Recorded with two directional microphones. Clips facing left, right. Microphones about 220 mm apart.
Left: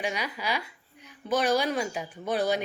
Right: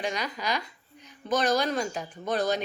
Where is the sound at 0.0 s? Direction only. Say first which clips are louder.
Even; 10° left (ahead or behind).